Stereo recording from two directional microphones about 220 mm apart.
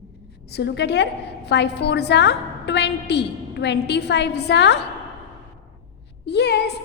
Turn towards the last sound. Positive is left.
turn(degrees=50)  # may be behind; listen again after turning